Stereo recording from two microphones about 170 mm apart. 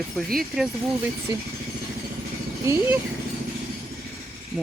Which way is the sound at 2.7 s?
15° right (ahead or behind).